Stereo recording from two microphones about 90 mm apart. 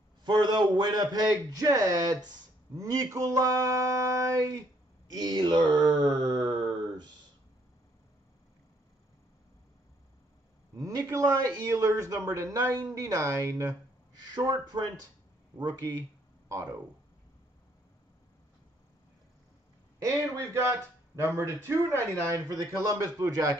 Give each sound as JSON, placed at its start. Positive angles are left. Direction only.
{"t": 0.2, "sound": "a man's voice", "side_deg": -55}
{"t": 5.0, "sound": "speech", "side_deg": -50}
{"t": 10.8, "sound": "a man's voice", "side_deg": -40}
{"t": 14.3, "sound": "speech", "side_deg": -50}
{"t": 16.4, "sound": "speech", "side_deg": -35}
{"t": 20.0, "sound": "a man's voice", "side_deg": -35}
{"t": 22.3, "sound": "a man's voice", "side_deg": -40}